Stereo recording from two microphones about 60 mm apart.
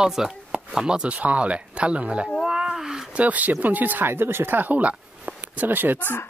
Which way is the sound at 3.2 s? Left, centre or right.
Right.